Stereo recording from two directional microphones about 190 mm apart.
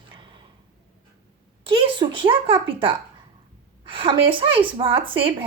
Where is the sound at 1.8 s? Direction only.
25° right (ahead or behind).